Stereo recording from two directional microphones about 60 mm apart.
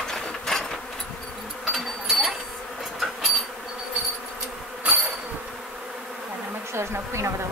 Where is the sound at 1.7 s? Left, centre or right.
Centre.